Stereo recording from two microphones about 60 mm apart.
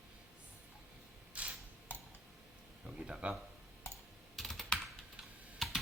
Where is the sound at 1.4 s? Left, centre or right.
Right.